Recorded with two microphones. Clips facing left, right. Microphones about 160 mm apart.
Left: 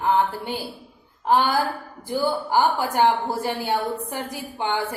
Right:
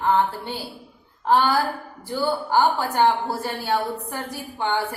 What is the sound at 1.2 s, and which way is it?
A woman's voice, 15° left (ahead or behind).